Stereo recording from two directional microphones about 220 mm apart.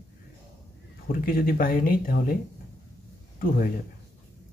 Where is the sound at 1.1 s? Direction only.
40° left (ahead or behind).